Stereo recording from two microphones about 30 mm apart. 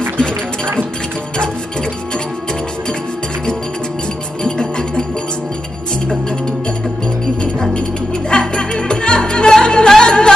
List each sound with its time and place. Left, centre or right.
4.4 s music: left
8.3 s music: left